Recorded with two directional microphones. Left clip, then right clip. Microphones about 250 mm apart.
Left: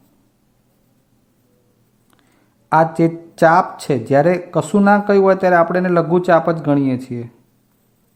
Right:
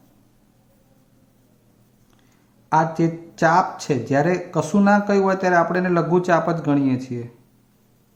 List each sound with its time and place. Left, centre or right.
2.6 s speech: left